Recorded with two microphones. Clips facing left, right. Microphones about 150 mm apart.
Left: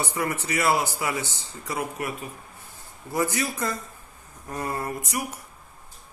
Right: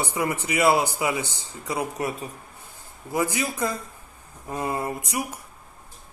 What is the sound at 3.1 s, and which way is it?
Speech, 15° right (ahead or behind).